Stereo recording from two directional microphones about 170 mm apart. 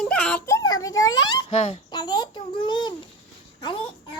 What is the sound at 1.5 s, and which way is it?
Speech, 40° left (ahead or behind).